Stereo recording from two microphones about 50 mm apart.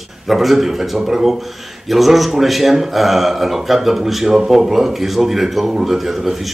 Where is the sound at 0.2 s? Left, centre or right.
Centre.